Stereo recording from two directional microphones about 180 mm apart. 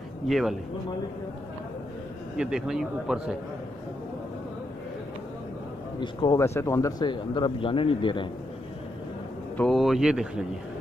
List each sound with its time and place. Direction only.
0.3 s a man's voice: centre (ahead or behind)
2.3 s a man's voice: 5° right (ahead or behind)
5.9 s speech: 20° left (ahead or behind)
9.6 s a man's voice: centre (ahead or behind)